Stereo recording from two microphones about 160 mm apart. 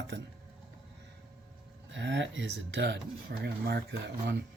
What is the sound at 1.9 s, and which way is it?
Speech, 90° right.